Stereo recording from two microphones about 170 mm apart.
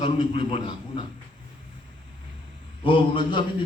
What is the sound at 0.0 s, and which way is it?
A man's voice, 35° left (ahead or behind).